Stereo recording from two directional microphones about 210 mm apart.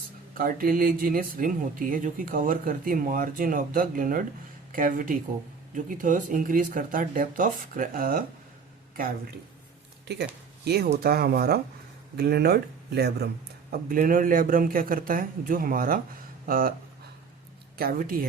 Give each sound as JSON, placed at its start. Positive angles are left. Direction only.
{"t": 0.3, "sound": "speech", "side_deg": -40}
{"t": 10.9, "sound": "speech", "side_deg": -45}
{"t": 17.7, "sound": "speech", "side_deg": -45}